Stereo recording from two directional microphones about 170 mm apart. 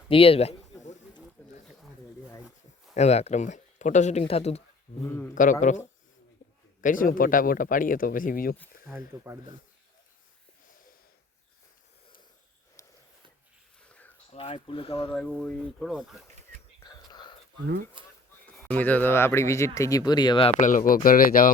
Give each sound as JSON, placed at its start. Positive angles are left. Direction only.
{"t": 0.1, "sound": "a sound", "side_deg": 35}
{"t": 1.4, "sound": "a sound", "side_deg": 10}
{"t": 2.9, "sound": "speech", "side_deg": 40}
{"t": 5.0, "sound": "speech", "side_deg": 15}
{"t": 5.3, "sound": "speech", "side_deg": 50}
{"t": 6.8, "sound": "speech", "side_deg": 55}
{"t": 8.9, "sound": "speech", "side_deg": -10}
{"t": 14.3, "sound": "speech", "side_deg": 35}
{"t": 15.1, "sound": "speech", "side_deg": 5}
{"t": 16.8, "sound": "whispering", "side_deg": 25}
{"t": 18.0, "sound": "a sound", "side_deg": -30}
{"t": 18.6, "sound": "speech", "side_deg": 10}
{"t": 20.6, "sound": "speech", "side_deg": 50}